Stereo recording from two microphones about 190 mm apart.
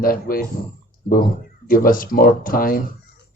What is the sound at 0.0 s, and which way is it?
Speech, 50° left (ahead or behind).